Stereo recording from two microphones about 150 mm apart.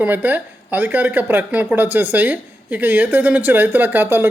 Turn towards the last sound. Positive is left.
turn(degrees=-15)  # may be behind; listen again after turning